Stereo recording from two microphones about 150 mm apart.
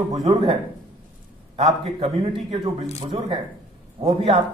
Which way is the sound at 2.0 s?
40° right (ahead or behind).